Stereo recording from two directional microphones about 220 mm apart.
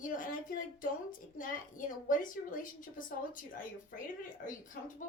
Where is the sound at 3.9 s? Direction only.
35° left (ahead or behind).